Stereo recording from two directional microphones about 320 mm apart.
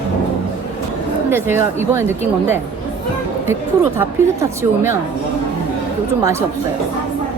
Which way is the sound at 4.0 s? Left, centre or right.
Centre.